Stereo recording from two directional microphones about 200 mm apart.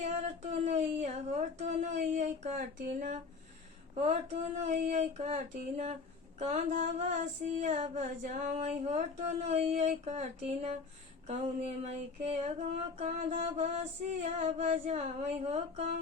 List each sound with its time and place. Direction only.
0.6 s speech: 35° right (ahead or behind)
3.9 s female singing: 30° right (ahead or behind)